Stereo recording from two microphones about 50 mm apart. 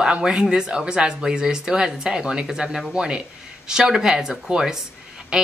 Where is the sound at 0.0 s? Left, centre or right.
Centre.